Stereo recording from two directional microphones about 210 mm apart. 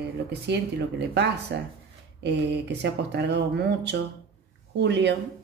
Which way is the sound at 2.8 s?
55° right (ahead or behind).